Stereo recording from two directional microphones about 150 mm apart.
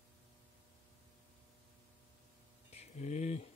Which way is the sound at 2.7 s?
45° left (ahead or behind).